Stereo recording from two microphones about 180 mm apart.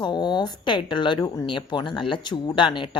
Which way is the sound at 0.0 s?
25° left (ahead or behind).